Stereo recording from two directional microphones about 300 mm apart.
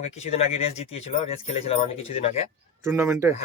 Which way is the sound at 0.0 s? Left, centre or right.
Left.